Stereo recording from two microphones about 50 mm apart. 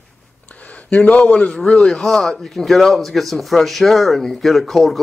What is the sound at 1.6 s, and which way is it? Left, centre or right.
Speech, centre.